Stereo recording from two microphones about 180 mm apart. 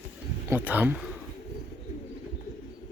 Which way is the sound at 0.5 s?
10° right (ahead or behind).